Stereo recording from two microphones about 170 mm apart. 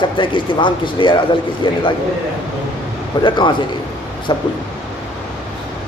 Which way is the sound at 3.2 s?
30° left (ahead or behind).